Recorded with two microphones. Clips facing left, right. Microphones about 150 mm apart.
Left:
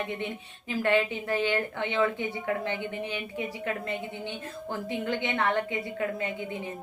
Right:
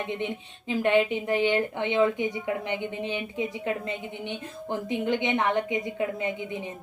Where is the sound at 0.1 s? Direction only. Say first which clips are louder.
Right 3 dB; 20° right (ahead or behind).